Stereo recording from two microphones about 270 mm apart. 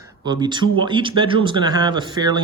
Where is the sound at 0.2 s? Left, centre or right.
Centre.